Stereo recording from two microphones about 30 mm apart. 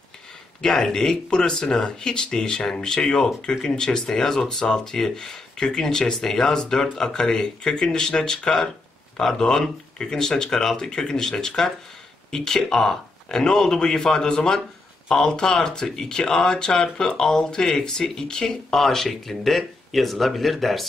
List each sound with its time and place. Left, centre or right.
0.6 s speech: centre
18.7 s speech: centre